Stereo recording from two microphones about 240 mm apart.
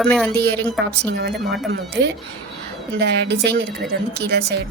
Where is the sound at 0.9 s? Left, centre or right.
Right.